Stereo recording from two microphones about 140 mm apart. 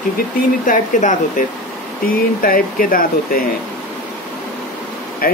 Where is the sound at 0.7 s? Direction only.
65° left (ahead or behind).